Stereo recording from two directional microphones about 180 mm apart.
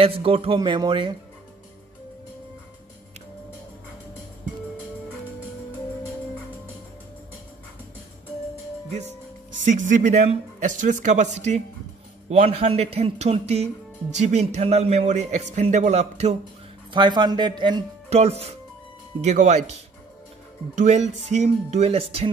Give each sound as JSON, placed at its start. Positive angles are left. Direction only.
{"t": 0.0, "sound": "speech", "side_deg": -30}
{"t": 9.7, "sound": "a man's voice", "side_deg": -45}
{"t": 16.9, "sound": "speech", "side_deg": -25}
{"t": 18.1, "sound": "a man's voice", "side_deg": -35}